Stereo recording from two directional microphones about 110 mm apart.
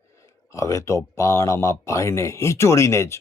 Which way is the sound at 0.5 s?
30° left (ahead or behind).